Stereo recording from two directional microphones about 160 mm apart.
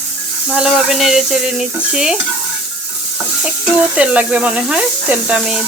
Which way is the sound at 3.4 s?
5° right (ahead or behind).